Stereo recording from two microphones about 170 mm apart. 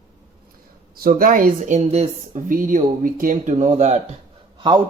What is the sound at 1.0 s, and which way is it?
Speech, 60° right (ahead or behind).